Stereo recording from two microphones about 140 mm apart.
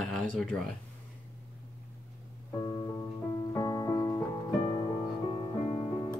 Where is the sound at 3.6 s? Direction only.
25° left (ahead or behind).